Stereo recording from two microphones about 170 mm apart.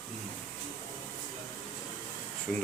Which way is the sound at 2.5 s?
Centre (ahead or behind).